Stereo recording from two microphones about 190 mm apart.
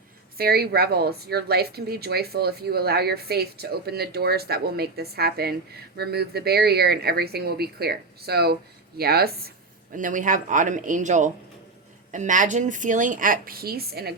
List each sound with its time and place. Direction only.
0.3 s a woman's voice: 55° right (ahead or behind)
9.9 s speech: 45° right (ahead or behind)